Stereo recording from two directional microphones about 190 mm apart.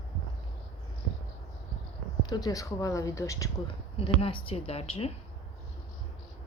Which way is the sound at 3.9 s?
30° left (ahead or behind).